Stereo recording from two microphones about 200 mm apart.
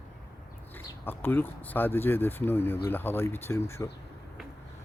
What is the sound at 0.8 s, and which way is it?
Speech, 10° left (ahead or behind).